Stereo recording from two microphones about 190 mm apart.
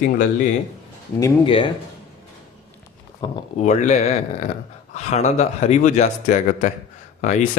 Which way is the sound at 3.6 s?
40° left (ahead or behind).